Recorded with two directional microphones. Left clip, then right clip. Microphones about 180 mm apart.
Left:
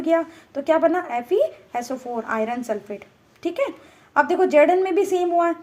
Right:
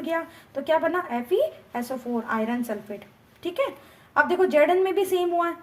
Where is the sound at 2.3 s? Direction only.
35° left (ahead or behind).